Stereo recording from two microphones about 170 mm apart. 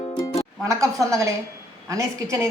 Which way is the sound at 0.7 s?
20° right (ahead or behind).